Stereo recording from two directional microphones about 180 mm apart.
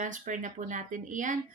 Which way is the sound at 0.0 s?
45° right (ahead or behind).